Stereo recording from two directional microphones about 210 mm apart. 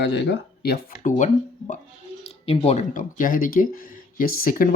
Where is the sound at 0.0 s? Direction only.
55° left (ahead or behind).